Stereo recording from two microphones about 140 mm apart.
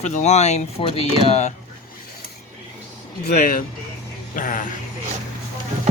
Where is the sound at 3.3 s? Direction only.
75° left (ahead or behind).